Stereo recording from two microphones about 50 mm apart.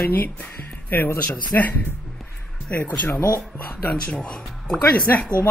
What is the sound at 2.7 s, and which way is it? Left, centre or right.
Speech, left.